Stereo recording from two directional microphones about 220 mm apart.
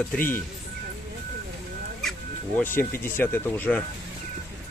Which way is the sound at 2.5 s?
10° left (ahead or behind).